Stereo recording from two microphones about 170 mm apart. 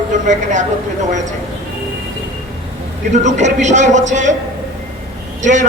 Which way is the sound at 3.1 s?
45° right (ahead or behind).